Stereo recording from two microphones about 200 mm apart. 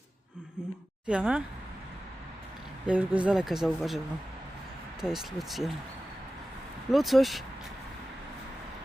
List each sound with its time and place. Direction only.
1.0 s speech: 5° right (ahead or behind)
2.8 s speech: 5° right (ahead or behind)
6.9 s speech: centre (ahead or behind)